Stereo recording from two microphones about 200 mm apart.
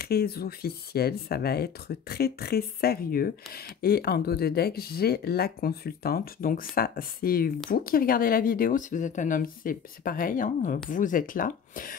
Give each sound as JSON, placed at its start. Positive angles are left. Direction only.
{"t": 0.0, "sound": "speech", "side_deg": 50}